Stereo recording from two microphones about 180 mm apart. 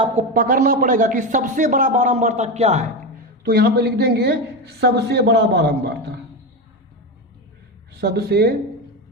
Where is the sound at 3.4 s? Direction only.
55° right (ahead or behind).